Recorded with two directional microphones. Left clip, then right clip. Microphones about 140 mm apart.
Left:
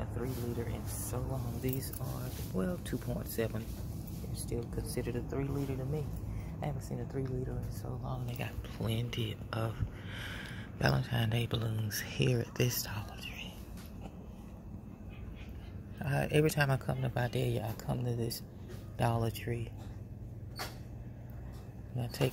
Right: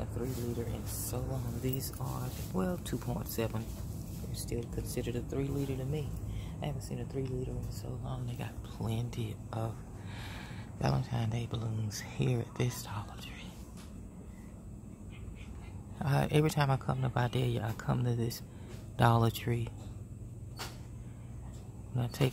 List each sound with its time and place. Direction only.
0.2 s speech: 20° right (ahead or behind)
6.6 s speech: 5° right (ahead or behind)
10.8 s speech: centre (ahead or behind)
12.9 s whispering: 15° right (ahead or behind)
16.0 s speech: 25° right (ahead or behind)
21.9 s speech: 25° right (ahead or behind)